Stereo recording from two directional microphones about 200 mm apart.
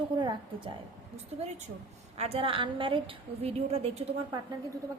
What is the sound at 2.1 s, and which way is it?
A woman's voice, 30° right (ahead or behind).